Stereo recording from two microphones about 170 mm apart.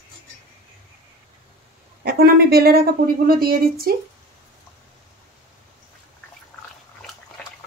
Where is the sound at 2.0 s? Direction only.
65° right (ahead or behind).